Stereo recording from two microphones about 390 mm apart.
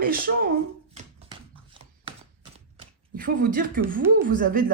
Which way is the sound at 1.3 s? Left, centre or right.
Centre.